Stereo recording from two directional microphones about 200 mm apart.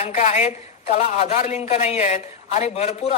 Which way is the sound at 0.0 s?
35° left (ahead or behind).